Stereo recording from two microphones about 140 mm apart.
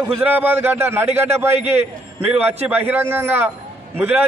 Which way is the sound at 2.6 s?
15° right (ahead or behind).